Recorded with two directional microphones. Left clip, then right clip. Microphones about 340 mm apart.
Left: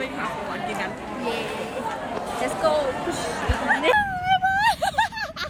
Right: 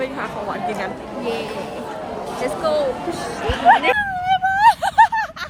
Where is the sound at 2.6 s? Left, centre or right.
Centre.